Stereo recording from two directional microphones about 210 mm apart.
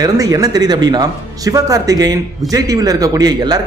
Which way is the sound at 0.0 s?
15° right (ahead or behind).